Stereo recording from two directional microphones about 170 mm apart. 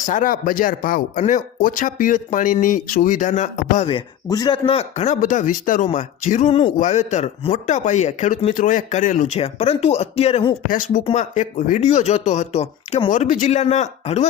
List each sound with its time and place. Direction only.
0.0 s speech: 50° left (ahead or behind)
4.3 s speech: 25° left (ahead or behind)
10.7 s speech: 50° left (ahead or behind)